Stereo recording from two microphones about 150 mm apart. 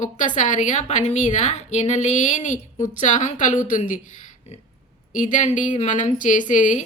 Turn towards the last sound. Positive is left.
turn(degrees=60)  # may be behind; listen again after turning